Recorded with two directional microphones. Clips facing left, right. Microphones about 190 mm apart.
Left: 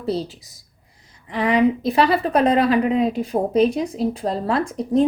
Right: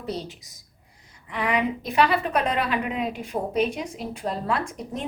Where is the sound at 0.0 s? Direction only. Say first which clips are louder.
Left 7 dB; 35° left (ahead or behind).